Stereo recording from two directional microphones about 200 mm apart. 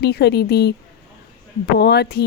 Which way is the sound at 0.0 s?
55° left (ahead or behind).